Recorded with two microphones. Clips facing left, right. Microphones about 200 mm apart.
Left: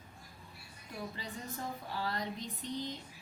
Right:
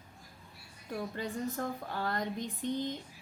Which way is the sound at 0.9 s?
50° right (ahead or behind).